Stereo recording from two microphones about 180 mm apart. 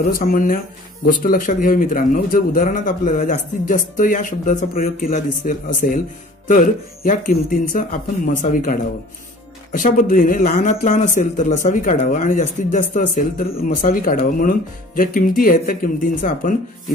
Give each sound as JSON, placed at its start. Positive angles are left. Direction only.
{"t": 0.0, "sound": "speech", "side_deg": 50}